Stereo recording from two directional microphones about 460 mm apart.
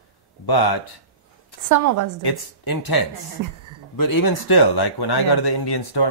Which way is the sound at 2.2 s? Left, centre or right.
Left.